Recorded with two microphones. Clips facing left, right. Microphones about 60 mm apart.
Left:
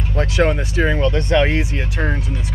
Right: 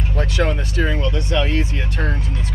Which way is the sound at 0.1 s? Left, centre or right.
Left.